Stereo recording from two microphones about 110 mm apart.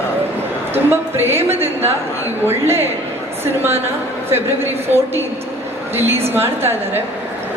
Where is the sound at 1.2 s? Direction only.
20° right (ahead or behind).